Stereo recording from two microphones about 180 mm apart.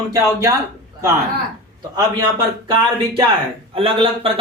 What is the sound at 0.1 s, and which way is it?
Speech, 15° right (ahead or behind).